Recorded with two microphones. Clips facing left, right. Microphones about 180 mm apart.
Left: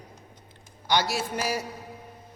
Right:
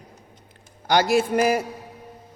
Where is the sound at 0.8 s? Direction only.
50° right (ahead or behind).